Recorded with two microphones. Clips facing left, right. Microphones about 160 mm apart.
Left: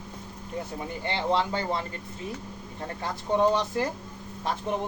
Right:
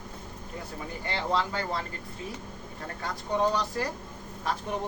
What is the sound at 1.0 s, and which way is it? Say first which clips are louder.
Speech: left 3 dB; 25° left (ahead or behind).